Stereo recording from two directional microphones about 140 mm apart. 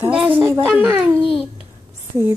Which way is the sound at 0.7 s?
15° right (ahead or behind).